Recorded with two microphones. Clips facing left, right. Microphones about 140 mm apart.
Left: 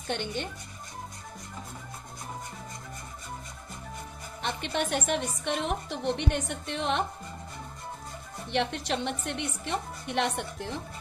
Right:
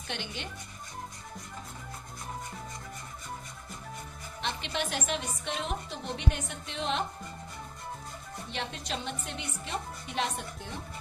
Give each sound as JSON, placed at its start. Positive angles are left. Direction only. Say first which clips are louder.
{"t": 0.1, "sound": "speech", "louder": "left 7 dB", "side_deg": 45}
{"t": 4.4, "sound": "a woman's voice", "louder": "left 3 dB", "side_deg": 50}
{"t": 8.5, "sound": "a woman's voice", "louder": "left 8 dB", "side_deg": 70}